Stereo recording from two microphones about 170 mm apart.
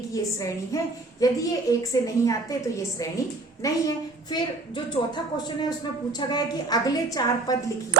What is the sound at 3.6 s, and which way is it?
A woman's voice, 25° left (ahead or behind).